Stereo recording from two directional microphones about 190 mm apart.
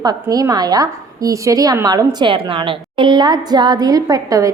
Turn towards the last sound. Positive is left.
turn(degrees=-20)  # may be behind; listen again after turning